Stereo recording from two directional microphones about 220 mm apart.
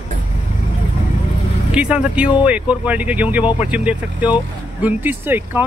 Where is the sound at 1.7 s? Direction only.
5° right (ahead or behind).